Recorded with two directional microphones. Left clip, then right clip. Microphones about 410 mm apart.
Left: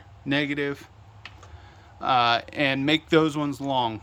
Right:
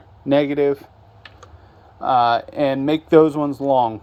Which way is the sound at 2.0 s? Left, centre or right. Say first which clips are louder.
Right 5 dB; centre.